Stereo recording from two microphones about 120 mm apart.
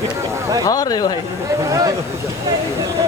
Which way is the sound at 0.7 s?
30° left (ahead or behind).